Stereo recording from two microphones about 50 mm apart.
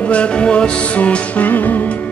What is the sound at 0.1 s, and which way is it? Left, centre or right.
Music, left.